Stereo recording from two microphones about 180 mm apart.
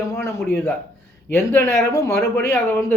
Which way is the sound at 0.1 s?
15° left (ahead or behind).